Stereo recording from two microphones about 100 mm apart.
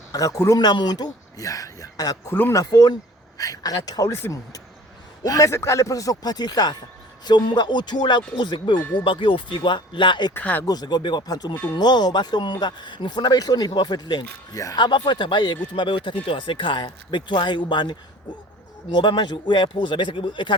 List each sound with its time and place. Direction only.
0.1 s speech: 35° left (ahead or behind)
0.6 s a man's voice: 45° left (ahead or behind)
10.3 s speech: 20° left (ahead or behind)
10.7 s speech: 45° left (ahead or behind)
14.5 s speech: 35° left (ahead or behind)
14.8 s speech: 50° left (ahead or behind)